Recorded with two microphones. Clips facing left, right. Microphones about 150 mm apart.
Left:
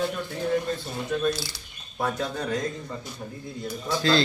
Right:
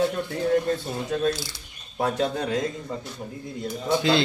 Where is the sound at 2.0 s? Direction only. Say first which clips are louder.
Right 4 dB; 25° right (ahead or behind).